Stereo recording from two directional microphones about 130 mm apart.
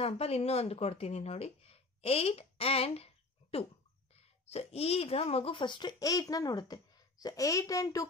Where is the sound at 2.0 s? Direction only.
50° left (ahead or behind).